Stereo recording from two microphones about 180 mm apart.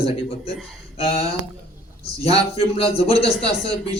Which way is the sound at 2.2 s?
30° left (ahead or behind).